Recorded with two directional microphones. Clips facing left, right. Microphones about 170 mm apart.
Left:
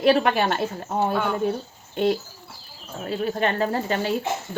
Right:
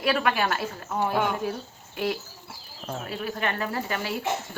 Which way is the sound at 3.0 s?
30° left (ahead or behind).